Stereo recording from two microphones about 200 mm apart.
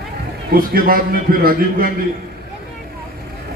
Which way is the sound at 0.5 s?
45° right (ahead or behind).